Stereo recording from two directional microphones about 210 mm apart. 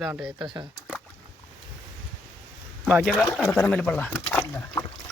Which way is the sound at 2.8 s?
Centre (ahead or behind).